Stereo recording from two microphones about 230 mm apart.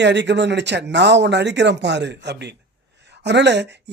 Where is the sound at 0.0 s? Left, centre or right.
Right.